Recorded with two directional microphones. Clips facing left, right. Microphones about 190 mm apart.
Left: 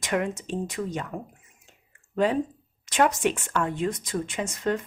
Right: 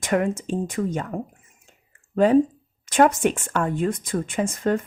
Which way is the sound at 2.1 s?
45° right (ahead or behind).